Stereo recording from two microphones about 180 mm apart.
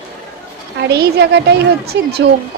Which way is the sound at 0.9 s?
65° right (ahead or behind).